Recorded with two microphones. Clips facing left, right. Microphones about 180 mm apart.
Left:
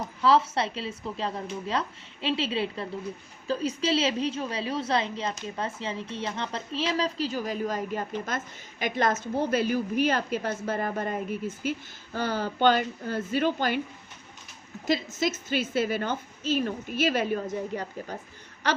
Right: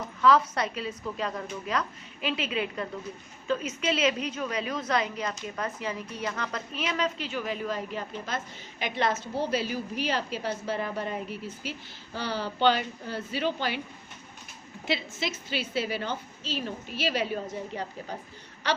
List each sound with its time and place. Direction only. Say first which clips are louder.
0.2 s a woman's voice: even; 30° left (ahead or behind); by 13.8 s 50° left (ahead or behind)
14.8 s a woman's voice: left 5 dB; 45° left (ahead or behind)